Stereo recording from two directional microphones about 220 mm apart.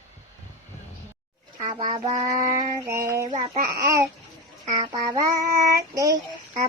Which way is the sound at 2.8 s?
15° right (ahead or behind).